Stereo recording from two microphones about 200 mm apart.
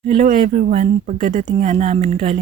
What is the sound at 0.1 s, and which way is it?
Speech, 40° right (ahead or behind).